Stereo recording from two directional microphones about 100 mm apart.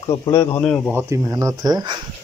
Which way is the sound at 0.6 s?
10° left (ahead or behind).